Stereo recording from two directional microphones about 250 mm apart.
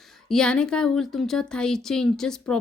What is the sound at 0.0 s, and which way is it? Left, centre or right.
Speech, centre.